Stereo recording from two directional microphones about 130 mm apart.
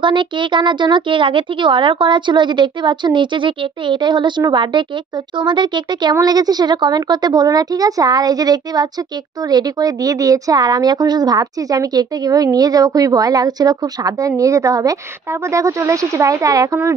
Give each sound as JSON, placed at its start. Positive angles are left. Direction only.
{"t": 0.0, "sound": "a woman's voice", "side_deg": -40}